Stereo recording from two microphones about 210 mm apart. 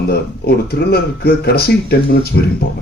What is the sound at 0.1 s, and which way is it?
Speech, 45° left (ahead or behind).